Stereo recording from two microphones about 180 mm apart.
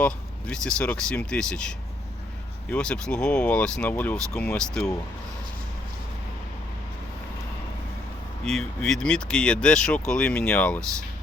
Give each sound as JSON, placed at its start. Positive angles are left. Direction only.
{"t": 0.0, "sound": "speech", "side_deg": 5}
{"t": 8.4, "sound": "speech", "side_deg": 5}